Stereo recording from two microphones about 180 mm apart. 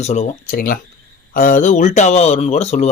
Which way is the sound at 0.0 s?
40° left (ahead or behind).